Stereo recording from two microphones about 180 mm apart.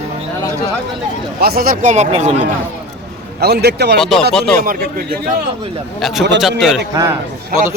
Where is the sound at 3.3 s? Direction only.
65° right (ahead or behind).